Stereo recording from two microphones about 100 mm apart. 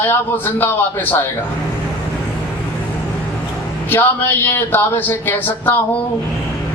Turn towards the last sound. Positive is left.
turn(degrees=20)  # may be behind; listen again after turning